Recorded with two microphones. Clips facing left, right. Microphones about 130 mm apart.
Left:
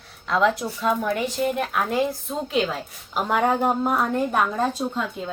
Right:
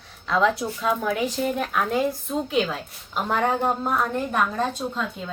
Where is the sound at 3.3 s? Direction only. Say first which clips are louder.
Left 2 dB; 10° left (ahead or behind).